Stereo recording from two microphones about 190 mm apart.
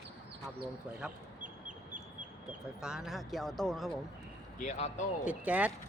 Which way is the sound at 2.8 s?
5° right (ahead or behind).